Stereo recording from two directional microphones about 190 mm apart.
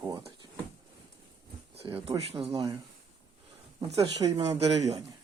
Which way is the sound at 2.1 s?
30° right (ahead or behind).